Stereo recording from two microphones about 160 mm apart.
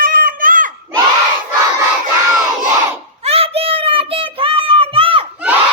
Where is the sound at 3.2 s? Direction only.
40° right (ahead or behind).